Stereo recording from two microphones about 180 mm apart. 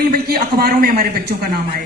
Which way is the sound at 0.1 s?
55° right (ahead or behind).